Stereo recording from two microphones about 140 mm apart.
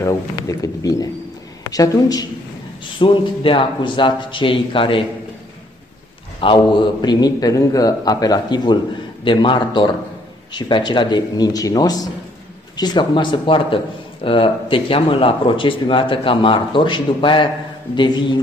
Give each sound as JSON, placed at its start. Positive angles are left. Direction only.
{"t": 0.0, "sound": "a man's voice", "side_deg": 25}
{"t": 3.0, "sound": "speech", "side_deg": 35}
{"t": 6.4, "sound": "a man's voice", "side_deg": 35}